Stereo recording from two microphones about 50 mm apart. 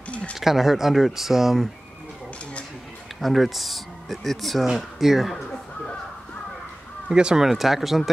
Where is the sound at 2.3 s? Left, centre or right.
Left.